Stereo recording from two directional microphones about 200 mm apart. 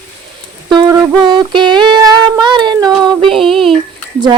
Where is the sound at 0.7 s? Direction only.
20° right (ahead or behind).